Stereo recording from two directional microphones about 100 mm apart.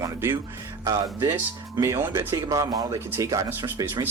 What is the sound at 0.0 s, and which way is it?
Music, 25° right (ahead or behind).